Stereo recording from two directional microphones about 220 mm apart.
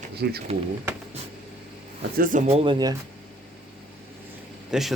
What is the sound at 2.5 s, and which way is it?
Speech, 25° right (ahead or behind).